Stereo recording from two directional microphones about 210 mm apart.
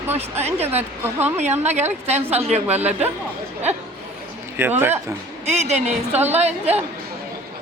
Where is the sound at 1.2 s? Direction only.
30° right (ahead or behind).